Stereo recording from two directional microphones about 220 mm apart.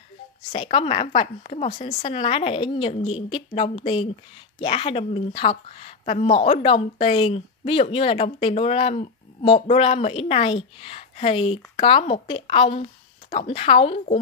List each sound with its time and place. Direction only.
0.5 s a woman's voice: 25° left (ahead or behind)